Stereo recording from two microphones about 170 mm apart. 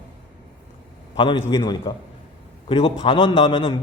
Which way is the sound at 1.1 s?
30° left (ahead or behind).